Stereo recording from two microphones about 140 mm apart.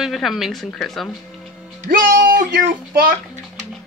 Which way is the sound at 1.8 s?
85° right.